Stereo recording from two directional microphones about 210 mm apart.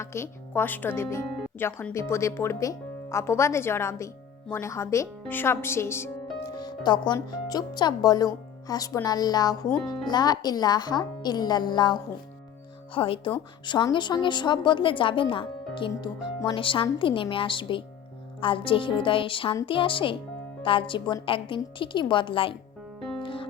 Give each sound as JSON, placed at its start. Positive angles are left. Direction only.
{"t": 0.0, "sound": "a woman's voice", "side_deg": 10}
{"t": 23.2, "sound": "music", "side_deg": 25}